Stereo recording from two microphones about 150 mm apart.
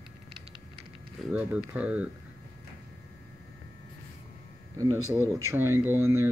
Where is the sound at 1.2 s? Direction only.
10° right (ahead or behind).